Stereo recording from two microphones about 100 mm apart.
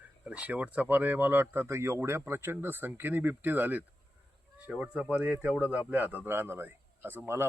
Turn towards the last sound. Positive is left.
turn(degrees=-25)  # may be behind; listen again after turning